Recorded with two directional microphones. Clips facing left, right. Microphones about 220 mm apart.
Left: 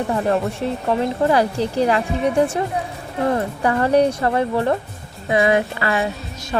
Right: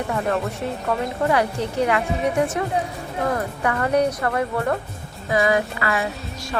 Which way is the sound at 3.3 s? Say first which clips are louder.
Left 4 dB; 30° left (ahead or behind).